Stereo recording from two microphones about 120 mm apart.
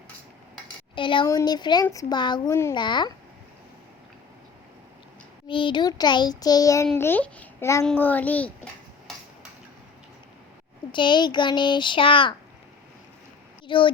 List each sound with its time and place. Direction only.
0.9 s speech: 45° left (ahead or behind)
1.3 s a child's voice: 30° left (ahead or behind)
2.5 s a child's voice: 20° left (ahead or behind)
2.7 s a child's voice: 40° left (ahead or behind)
5.5 s a child's voice: 45° left (ahead or behind)
7.0 s a child's voice: 15° left (ahead or behind)
10.9 s a child's voice: 40° left (ahead or behind)
13.7 s speech: 45° left (ahead or behind)